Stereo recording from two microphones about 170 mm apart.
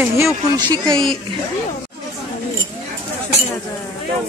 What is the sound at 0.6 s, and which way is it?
Speech, 25° right (ahead or behind).